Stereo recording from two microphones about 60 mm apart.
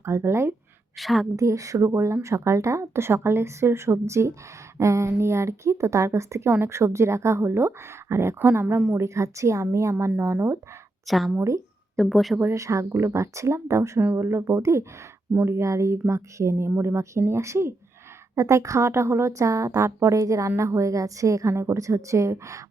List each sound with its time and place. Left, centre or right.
0.0 s speech: right
0.9 s speech: centre
1.4 s a woman's voice: right
11.0 s speech: centre
12.4 s a woman's voice: right